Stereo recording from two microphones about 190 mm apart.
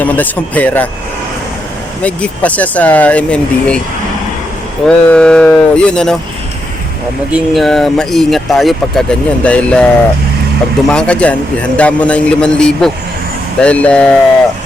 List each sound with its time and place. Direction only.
0.0 s speech: 10° left (ahead or behind)
2.0 s speech: 5° left (ahead or behind)
4.9 s speech: 5° left (ahead or behind)
7.3 s speech: centre (ahead or behind)